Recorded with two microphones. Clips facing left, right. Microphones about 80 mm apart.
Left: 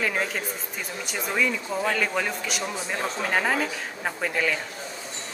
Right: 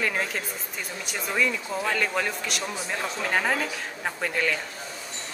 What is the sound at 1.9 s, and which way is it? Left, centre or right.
Speech, centre.